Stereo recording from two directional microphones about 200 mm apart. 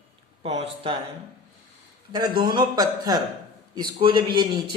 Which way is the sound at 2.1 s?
20° right (ahead or behind).